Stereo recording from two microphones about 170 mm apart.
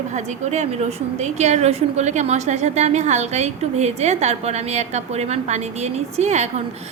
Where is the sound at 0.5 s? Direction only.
40° right (ahead or behind).